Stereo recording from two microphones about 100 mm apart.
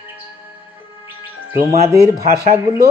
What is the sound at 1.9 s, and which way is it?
Owl, 30° right (ahead or behind).